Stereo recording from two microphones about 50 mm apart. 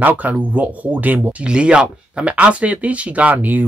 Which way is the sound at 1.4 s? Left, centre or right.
Centre.